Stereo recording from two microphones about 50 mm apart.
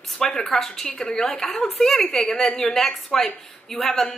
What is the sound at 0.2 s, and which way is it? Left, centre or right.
A woman's voice, centre.